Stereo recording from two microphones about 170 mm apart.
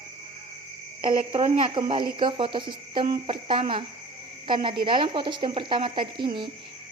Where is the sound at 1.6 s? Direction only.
30° right (ahead or behind).